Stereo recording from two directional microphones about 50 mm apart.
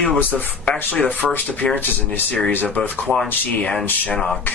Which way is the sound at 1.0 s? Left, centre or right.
Left.